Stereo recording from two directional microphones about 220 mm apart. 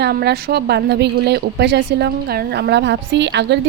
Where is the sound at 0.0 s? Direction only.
45° right (ahead or behind).